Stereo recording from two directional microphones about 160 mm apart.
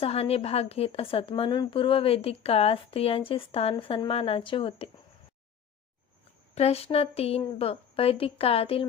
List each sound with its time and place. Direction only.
0.0 s speech: 40° left (ahead or behind)
6.5 s speech: 40° left (ahead or behind)